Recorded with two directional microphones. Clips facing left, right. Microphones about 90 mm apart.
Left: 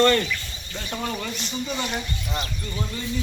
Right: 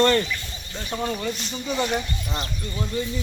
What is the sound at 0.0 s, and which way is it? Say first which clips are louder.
Speech: even; 25° right (ahead or behind).